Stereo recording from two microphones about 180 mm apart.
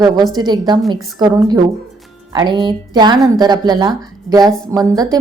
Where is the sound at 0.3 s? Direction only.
25° right (ahead or behind).